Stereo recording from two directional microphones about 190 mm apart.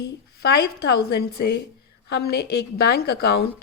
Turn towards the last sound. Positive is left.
turn(degrees=55)  # may be behind; listen again after turning